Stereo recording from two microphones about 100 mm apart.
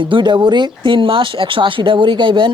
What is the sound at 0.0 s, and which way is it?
Speech, 55° right (ahead or behind).